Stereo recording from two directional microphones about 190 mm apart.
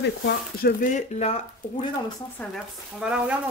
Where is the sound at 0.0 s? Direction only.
70° left (ahead or behind); by 1.9 s 35° left (ahead or behind).